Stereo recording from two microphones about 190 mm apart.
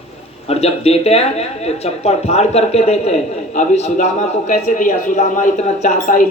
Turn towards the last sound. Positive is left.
turn(degrees=40)  # may be behind; listen again after turning